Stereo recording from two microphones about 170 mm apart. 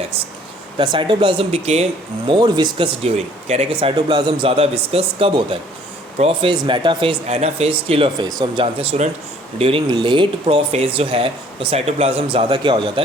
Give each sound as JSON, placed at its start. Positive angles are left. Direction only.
{"t": 0.8, "sound": "speech", "side_deg": -30}
{"t": 8.6, "sound": "speech", "side_deg": -35}